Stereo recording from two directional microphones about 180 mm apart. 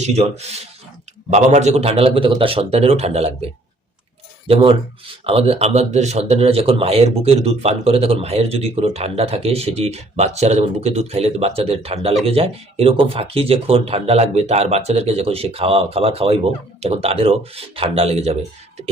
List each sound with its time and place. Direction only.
0.0 s speech: 35° right (ahead or behind)
4.4 s speech: 30° right (ahead or behind)